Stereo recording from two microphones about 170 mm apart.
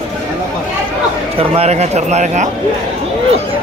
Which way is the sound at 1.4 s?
35° right (ahead or behind).